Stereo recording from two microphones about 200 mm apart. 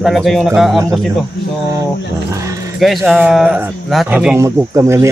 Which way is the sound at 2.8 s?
Centre (ahead or behind).